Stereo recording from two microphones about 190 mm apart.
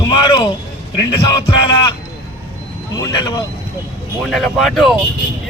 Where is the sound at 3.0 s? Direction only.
20° left (ahead or behind).